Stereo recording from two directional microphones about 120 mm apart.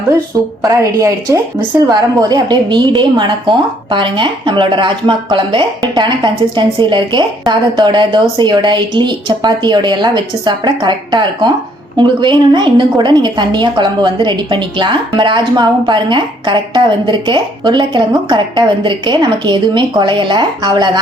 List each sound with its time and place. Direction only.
0.6 s a woman's voice: 30° right (ahead or behind)